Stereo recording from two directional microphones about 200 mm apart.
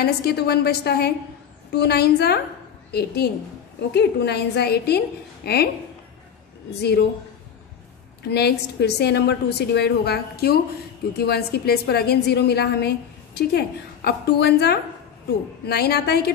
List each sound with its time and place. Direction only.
0.0 s a woman's voice: 55° left (ahead or behind)
6.7 s a woman's voice: 55° left (ahead or behind)
8.2 s a woman's voice: 55° left (ahead or behind)